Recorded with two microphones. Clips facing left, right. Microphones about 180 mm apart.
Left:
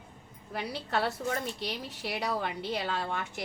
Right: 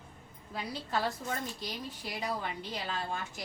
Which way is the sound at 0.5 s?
70° left (ahead or behind).